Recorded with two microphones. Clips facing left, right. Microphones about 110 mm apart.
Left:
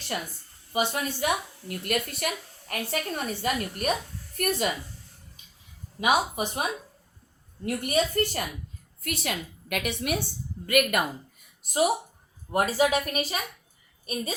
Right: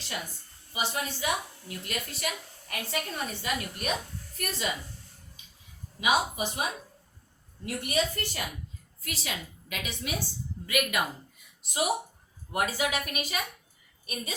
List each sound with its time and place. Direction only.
0.7 s a woman's voice: 55° left (ahead or behind)
6.0 s a woman's voice: 50° left (ahead or behind)
11.6 s a woman's voice: 40° left (ahead or behind)